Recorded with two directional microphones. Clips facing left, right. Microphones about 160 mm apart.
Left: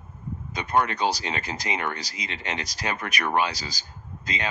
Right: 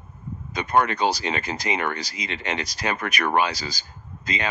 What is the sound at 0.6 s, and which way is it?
Speech, 70° right (ahead or behind).